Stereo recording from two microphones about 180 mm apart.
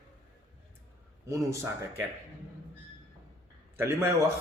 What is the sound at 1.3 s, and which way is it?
Speech, 15° right (ahead or behind).